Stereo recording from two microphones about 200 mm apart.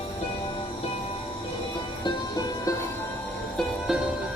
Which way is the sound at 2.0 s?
20° left (ahead or behind).